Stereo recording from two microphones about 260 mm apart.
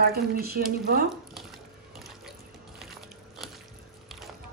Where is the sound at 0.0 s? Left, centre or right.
Right.